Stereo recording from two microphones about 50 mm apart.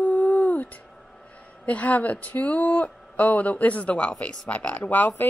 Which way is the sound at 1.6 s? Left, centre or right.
Left.